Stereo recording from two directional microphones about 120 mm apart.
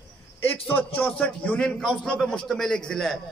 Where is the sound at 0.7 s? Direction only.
15° left (ahead or behind).